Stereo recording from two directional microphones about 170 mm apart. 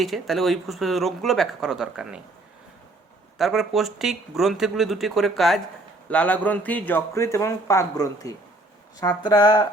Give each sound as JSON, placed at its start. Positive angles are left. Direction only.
{"t": 0.0, "sound": "speech", "side_deg": 0}
{"t": 3.3, "sound": "speech", "side_deg": 0}